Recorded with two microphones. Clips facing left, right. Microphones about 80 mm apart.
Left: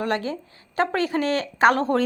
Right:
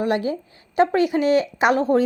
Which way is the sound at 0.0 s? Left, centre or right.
Centre.